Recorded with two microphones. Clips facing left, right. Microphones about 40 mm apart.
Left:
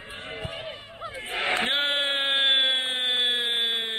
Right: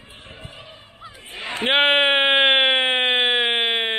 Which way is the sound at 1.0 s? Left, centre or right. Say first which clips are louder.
Left 5 dB; left.